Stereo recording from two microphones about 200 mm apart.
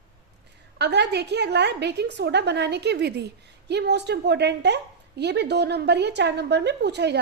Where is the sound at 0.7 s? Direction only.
60° right (ahead or behind).